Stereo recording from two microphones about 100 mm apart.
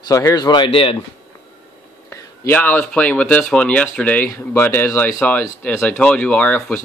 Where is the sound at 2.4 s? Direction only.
20° left (ahead or behind).